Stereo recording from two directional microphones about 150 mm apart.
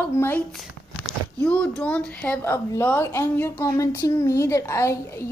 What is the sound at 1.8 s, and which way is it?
A woman's voice, 10° left (ahead or behind).